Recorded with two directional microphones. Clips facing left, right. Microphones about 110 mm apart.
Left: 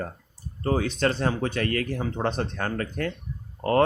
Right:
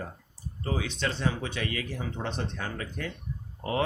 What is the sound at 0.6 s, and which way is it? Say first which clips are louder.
Speech: left 7 dB; 45° left (ahead or behind).